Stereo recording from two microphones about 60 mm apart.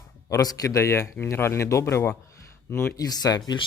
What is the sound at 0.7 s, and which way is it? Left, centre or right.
Speech, left.